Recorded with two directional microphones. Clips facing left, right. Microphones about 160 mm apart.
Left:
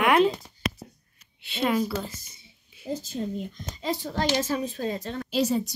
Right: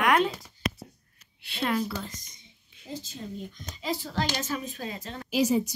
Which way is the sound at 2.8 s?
5° left (ahead or behind).